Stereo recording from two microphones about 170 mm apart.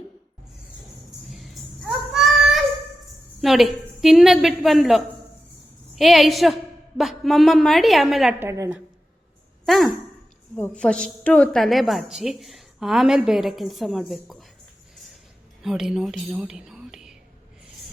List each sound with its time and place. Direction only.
1.3 s a sound: centre (ahead or behind)
3.4 s a woman's voice: centre (ahead or behind)
8.4 s a woman's voice: 15° right (ahead or behind)
9.6 s a woman's voice: centre (ahead or behind)
15.6 s speech: 5° right (ahead or behind)